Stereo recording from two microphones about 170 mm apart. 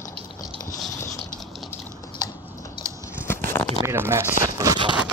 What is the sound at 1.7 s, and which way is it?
Typing, 20° left (ahead or behind).